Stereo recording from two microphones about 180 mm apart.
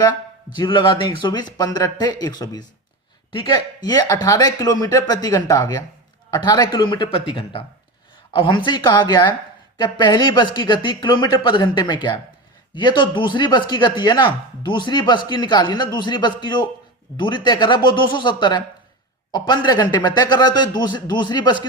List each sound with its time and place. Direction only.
0.0 s speech: 25° left (ahead or behind)